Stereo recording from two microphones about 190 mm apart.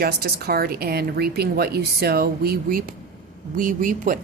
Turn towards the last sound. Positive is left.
turn(degrees=-45)  # may be behind; listen again after turning